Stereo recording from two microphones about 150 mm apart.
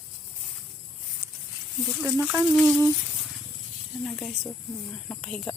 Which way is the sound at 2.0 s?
10° right (ahead or behind).